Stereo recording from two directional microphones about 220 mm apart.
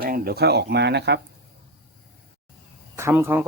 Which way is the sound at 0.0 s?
40° right (ahead or behind).